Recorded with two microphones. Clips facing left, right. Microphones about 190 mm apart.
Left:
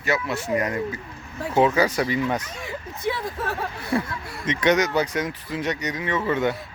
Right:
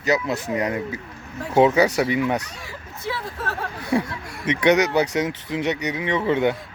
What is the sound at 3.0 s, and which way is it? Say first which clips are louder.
Speech: left 2 dB; 15° left (ahead or behind).